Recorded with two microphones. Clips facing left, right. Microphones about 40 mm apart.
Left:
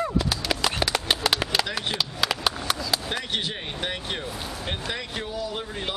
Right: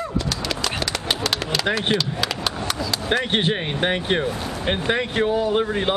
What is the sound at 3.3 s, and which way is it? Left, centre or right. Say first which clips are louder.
Speech: right 8 dB; right.